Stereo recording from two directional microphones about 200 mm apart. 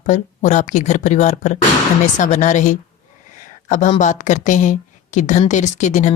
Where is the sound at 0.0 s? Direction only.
40° left (ahead or behind).